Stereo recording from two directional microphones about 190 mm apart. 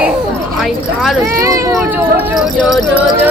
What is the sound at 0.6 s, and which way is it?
Speech, centre (ahead or behind).